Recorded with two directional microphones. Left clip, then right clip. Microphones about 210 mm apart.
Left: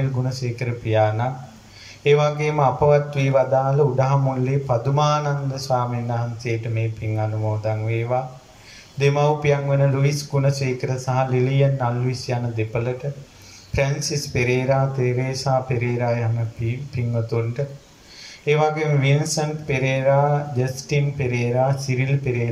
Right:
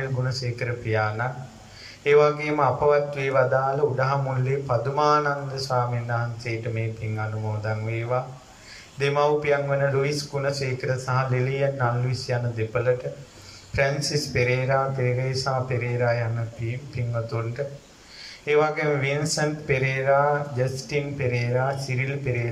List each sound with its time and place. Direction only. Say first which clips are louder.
0.2 s speech: left 1 dB; 15° left (ahead or behind)
18.4 s speech: left 2 dB; 15° left (ahead or behind)